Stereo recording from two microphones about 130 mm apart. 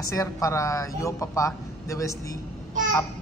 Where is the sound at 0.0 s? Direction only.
25° left (ahead or behind).